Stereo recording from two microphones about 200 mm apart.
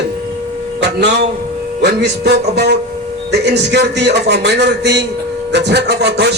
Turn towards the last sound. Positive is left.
turn(degrees=-55)  # may be behind; listen again after turning